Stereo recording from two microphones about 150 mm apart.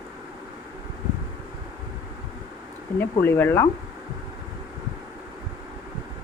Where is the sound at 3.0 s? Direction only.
15° left (ahead or behind).